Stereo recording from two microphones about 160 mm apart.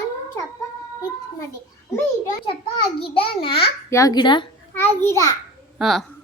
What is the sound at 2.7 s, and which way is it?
Speech, 35° left (ahead or behind).